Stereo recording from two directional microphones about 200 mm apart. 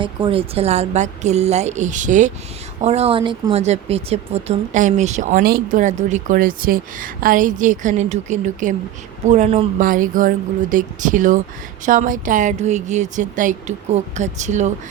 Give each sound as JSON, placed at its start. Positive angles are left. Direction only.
{"t": 0.0, "sound": "speech", "side_deg": -25}
{"t": 9.8, "sound": "speech", "side_deg": -45}